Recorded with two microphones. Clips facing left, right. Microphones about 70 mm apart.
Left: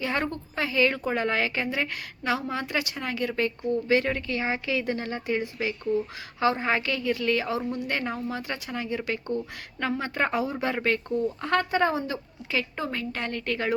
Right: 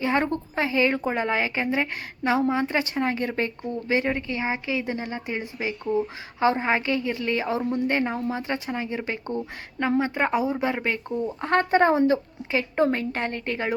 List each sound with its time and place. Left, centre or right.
0.0 s speech: right
10.0 s speech: centre